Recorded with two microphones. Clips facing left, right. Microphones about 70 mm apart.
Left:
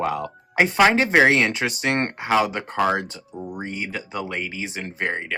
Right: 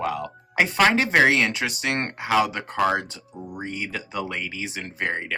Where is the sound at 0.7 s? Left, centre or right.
Centre.